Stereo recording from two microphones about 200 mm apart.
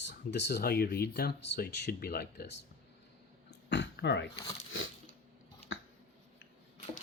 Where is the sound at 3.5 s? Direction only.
60° left (ahead or behind).